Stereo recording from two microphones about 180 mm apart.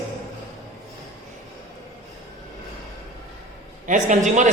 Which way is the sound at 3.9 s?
45° right (ahead or behind).